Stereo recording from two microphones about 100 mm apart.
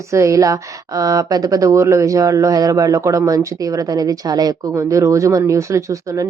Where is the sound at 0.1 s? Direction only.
30° right (ahead or behind).